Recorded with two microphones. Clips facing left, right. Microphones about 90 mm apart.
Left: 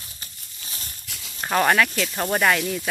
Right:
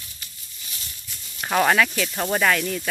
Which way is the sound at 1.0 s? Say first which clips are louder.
Left 3 dB; 80° left.